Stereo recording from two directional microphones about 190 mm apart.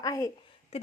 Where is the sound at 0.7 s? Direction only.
30° left (ahead or behind).